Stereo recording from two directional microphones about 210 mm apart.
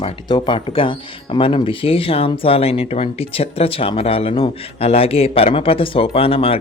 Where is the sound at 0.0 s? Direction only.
20° left (ahead or behind).